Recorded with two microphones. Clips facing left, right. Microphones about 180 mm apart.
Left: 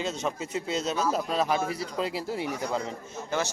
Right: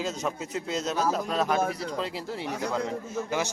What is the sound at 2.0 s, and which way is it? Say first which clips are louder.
Speech: left 2 dB; 10° left (ahead or behind).